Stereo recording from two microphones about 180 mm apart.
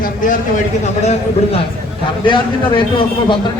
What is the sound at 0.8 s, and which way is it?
Speech, 35° left (ahead or behind).